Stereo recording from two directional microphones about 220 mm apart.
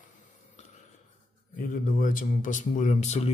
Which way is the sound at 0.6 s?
30° left (ahead or behind).